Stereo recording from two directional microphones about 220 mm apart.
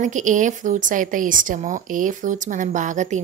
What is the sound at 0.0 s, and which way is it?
A woman's voice, 35° right (ahead or behind).